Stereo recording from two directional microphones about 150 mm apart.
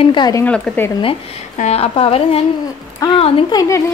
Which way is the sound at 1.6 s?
45° left (ahead or behind).